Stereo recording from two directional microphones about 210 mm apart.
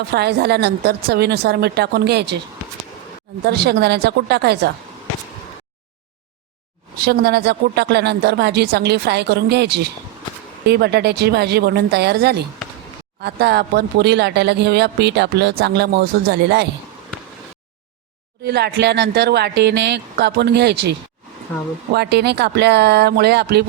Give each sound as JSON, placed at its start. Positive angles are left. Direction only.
{"t": 0.1, "sound": "speech", "side_deg": -50}
{"t": 3.4, "sound": "speech", "side_deg": -50}
{"t": 7.0, "sound": "speech", "side_deg": -50}
{"t": 18.4, "sound": "speech", "side_deg": -50}
{"t": 21.9, "sound": "speech", "side_deg": -50}